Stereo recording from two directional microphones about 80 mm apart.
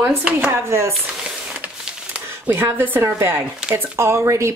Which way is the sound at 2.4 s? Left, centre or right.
Right.